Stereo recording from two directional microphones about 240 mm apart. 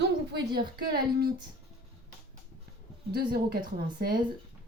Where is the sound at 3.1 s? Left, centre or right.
Right.